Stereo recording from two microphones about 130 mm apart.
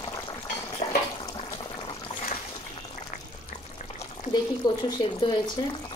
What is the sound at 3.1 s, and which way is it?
Boiling, 80° left.